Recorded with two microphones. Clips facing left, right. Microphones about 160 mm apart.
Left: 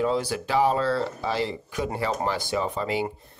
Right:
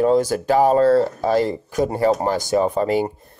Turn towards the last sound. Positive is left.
turn(degrees=-45)  # may be behind; listen again after turning